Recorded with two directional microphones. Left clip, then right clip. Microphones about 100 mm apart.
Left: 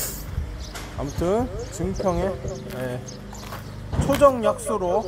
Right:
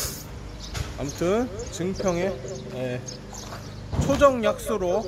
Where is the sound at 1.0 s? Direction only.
15° right (ahead or behind).